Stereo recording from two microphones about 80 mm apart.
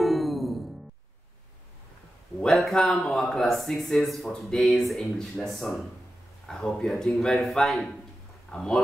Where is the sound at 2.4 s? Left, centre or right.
Centre.